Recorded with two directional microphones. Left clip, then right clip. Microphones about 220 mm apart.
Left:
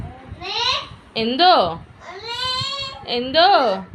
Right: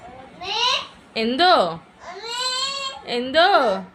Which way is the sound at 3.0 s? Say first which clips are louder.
Left 2 dB; 20° right (ahead or behind).